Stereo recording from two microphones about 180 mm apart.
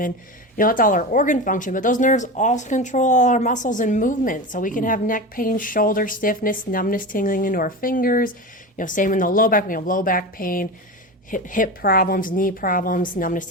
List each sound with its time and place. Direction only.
0.5 s speech: 50° left (ahead or behind)